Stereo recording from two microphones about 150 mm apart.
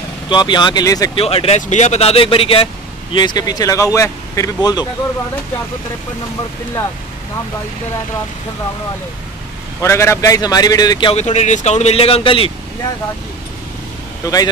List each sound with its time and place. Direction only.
0.3 s a man's voice: 30° left (ahead or behind)
1.1 s speech: 40° left (ahead or behind)
9.8 s a man's voice: 20° left (ahead or behind)
11.1 s speech: 50° left (ahead or behind)
14.2 s a man's voice: 25° left (ahead or behind)